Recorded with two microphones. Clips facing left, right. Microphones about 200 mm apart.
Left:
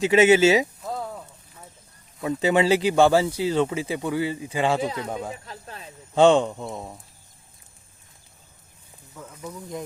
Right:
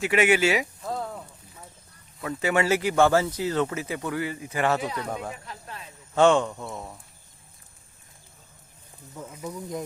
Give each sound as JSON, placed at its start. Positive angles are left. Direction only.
{"t": 0.0, "sound": "speech", "side_deg": 25}
{"t": 0.8, "sound": "a sound", "side_deg": 5}
{"t": 2.2, "sound": "speech", "side_deg": 20}
{"t": 4.8, "sound": "speech", "side_deg": 25}
{"t": 6.3, "sound": "speech", "side_deg": 20}
{"t": 9.1, "sound": "speech", "side_deg": -10}